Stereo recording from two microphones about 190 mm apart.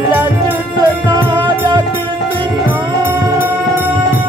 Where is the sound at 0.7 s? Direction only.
20° right (ahead or behind).